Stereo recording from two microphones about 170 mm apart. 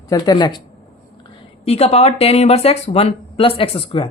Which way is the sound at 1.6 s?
35° left (ahead or behind).